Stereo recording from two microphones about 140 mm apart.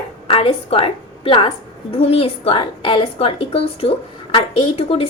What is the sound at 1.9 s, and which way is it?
A woman's voice, 45° left (ahead or behind).